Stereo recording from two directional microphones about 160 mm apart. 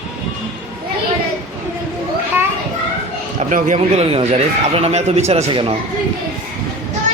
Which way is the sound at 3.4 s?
50° right (ahead or behind).